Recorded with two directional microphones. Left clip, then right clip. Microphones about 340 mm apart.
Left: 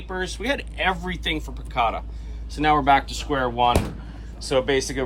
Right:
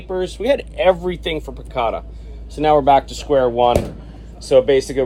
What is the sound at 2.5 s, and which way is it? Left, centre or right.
Speech, centre.